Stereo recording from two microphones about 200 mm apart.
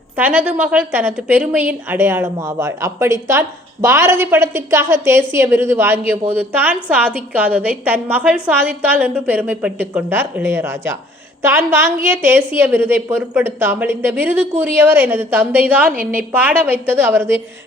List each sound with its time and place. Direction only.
0.2 s a woman's voice: 10° right (ahead or behind)